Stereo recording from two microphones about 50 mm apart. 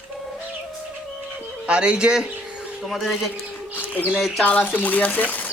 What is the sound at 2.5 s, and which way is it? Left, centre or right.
Bird, centre.